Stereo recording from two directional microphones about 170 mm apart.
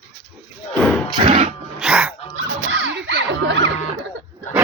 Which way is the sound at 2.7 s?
90° right.